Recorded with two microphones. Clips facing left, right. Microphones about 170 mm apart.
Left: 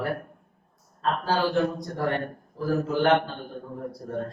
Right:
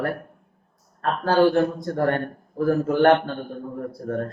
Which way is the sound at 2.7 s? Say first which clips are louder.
Right 5 dB; 55° right (ahead or behind).